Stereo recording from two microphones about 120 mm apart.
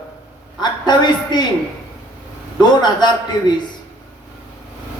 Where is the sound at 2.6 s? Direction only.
35° left (ahead or behind).